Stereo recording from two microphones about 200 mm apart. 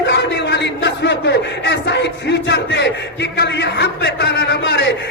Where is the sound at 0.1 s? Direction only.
60° left (ahead or behind).